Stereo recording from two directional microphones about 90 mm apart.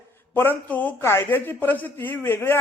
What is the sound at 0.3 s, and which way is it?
Speech, 20° left (ahead or behind).